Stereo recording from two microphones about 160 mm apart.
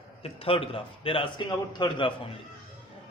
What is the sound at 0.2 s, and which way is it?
A man's voice, 35° left (ahead or behind).